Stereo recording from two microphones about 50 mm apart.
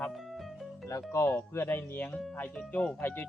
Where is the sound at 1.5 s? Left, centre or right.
Left.